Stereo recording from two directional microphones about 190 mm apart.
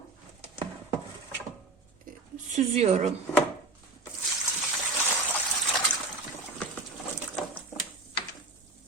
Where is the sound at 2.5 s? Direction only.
35° right (ahead or behind).